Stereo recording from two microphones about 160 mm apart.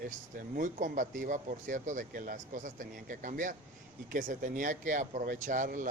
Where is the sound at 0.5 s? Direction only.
55° right (ahead or behind).